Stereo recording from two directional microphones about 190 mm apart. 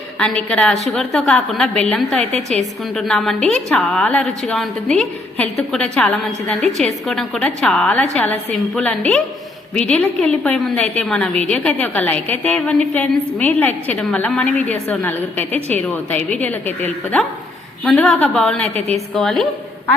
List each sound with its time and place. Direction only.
0.2 s a woman's voice: 5° left (ahead or behind)
2.3 s a woman's voice: 35° right (ahead or behind)
2.9 s a woman's voice: centre (ahead or behind)
18.7 s a woman's voice: 35° right (ahead or behind)
19.1 s a woman's voice: centre (ahead or behind)